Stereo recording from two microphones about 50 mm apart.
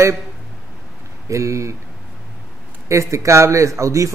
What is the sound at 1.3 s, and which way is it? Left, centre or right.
Speech, right.